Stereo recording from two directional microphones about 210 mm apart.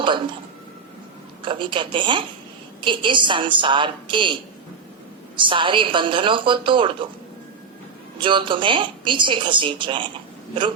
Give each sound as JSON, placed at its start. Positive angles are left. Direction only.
{"t": 0.0, "sound": "speech", "side_deg": -25}
{"t": 1.4, "sound": "speech", "side_deg": -25}
{"t": 5.4, "sound": "speech", "side_deg": -25}
{"t": 8.2, "sound": "speech", "side_deg": -25}